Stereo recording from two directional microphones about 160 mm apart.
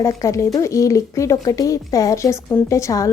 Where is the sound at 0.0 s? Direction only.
20° left (ahead or behind).